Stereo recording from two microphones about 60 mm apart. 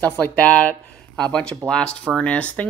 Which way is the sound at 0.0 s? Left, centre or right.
Left.